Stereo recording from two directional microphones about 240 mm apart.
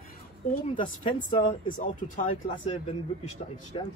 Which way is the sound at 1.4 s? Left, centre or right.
Left.